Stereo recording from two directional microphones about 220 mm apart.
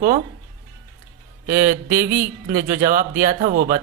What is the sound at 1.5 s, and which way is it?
A woman's voice, 40° right (ahead or behind).